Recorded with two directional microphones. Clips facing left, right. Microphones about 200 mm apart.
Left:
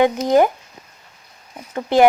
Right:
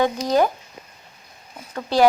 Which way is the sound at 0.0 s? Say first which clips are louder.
Left 4 dB; 20° left (ahead or behind).